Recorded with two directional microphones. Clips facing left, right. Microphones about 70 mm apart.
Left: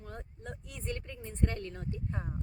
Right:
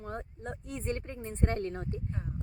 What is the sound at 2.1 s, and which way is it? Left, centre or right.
Speech, left.